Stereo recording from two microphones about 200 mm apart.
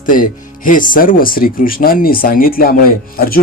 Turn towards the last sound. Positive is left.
turn(degrees=50)  # may be behind; listen again after turning